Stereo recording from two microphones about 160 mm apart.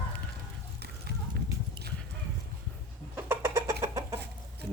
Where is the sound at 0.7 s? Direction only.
90° right.